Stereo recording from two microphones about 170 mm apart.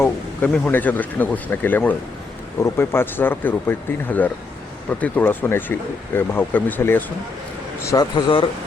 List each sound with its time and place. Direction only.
0.0 s speech: 10° left (ahead or behind)
7.9 s a man's voice: 25° left (ahead or behind)